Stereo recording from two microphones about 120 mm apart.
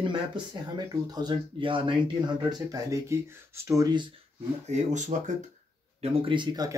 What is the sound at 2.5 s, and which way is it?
Speech, 30° right (ahead or behind).